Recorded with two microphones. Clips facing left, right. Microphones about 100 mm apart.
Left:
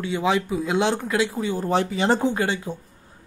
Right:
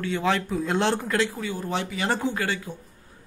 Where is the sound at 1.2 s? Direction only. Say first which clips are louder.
Left 5 dB; 25° left (ahead or behind).